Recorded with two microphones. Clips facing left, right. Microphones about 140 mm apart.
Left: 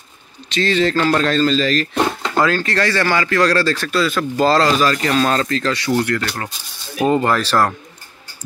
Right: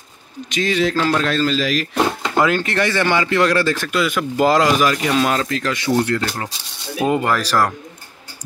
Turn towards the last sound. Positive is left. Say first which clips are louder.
# left 1 dB
turn(degrees=-10)  # may be behind; listen again after turning